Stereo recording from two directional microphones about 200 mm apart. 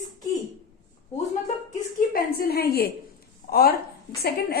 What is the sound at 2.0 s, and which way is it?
A woman's voice, 45° left (ahead or behind).